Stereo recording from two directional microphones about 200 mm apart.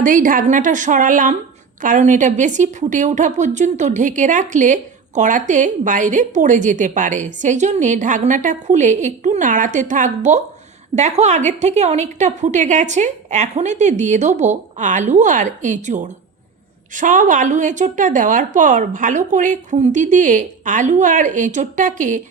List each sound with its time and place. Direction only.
0.0 s a woman's voice: 40° right (ahead or behind)